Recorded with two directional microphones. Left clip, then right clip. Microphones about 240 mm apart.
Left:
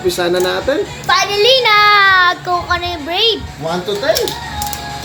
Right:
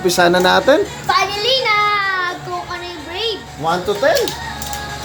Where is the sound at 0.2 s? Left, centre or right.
Right.